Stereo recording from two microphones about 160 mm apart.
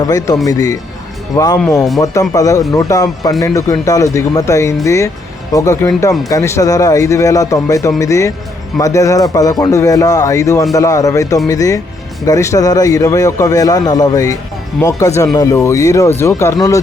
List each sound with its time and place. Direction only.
0.0 s speech: 20° left (ahead or behind)